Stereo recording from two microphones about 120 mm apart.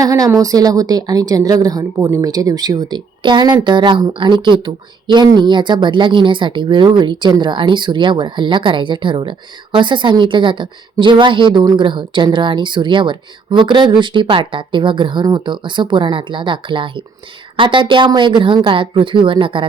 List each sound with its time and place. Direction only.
0.0 s a woman's voice: 30° right (ahead or behind); by 19.6 s 45° right (ahead or behind)